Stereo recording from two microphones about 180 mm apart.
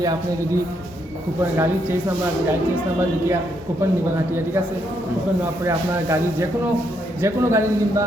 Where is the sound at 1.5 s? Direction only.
15° right (ahead or behind).